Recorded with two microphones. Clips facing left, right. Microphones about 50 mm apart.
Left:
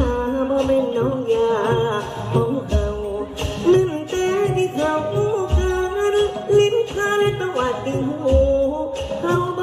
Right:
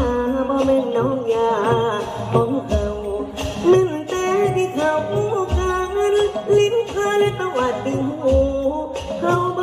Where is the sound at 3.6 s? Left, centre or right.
Right.